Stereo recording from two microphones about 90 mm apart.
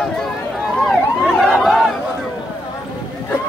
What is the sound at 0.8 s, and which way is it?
Emergency vehicle, 5° left (ahead or behind).